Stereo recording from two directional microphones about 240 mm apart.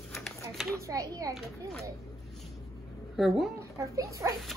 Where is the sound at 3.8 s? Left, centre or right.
Centre.